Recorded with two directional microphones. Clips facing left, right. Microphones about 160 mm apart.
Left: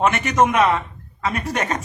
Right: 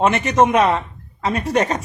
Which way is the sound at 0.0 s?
30° right (ahead or behind).